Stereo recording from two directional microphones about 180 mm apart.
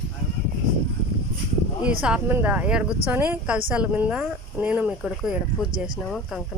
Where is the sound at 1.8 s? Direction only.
5° right (ahead or behind).